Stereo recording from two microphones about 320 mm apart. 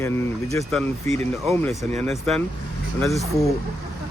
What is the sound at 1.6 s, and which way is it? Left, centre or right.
Speech, centre.